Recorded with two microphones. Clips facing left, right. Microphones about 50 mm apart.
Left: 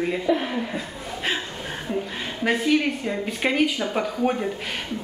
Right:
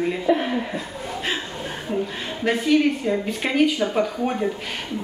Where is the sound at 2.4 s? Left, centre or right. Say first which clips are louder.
Right 2 dB; centre.